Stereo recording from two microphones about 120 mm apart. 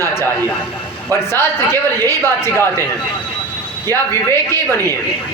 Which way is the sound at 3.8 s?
20° left (ahead or behind).